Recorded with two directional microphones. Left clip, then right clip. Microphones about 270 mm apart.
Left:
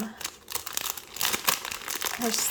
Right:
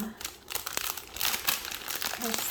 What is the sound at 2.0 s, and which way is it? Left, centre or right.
Crumpling, centre.